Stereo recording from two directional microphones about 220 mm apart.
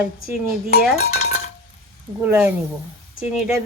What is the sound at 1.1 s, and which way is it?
Dishes, 30° left (ahead or behind).